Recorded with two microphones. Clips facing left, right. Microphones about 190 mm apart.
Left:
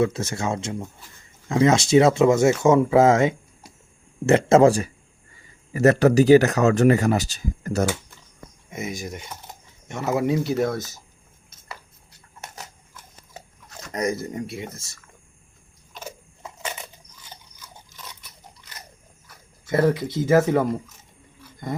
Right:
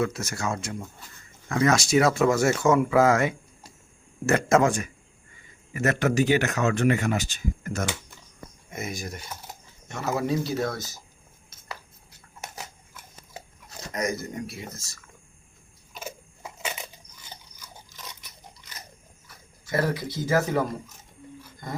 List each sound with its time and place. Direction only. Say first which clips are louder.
0.0 s speech: left 5 dB; 25° left (ahead or behind)
8.7 s speech: left 3 dB; 15° left (ahead or behind)
13.9 s speech: left 4 dB; 30° left (ahead or behind)
16.0 s a sound: even; 10° right (ahead or behind)
19.6 s speech: left 6 dB; 20° left (ahead or behind)